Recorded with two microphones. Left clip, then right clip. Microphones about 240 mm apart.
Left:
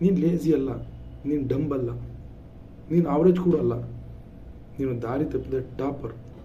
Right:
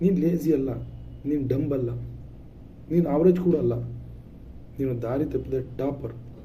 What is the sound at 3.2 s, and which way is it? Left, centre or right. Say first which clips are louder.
Speech: even; centre.